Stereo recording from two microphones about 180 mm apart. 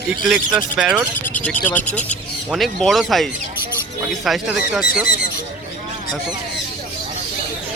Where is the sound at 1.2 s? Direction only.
10° left (ahead or behind).